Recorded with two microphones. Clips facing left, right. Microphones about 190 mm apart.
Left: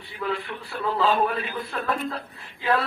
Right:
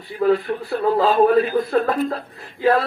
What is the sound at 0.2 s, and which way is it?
A man's voice, 40° right (ahead or behind).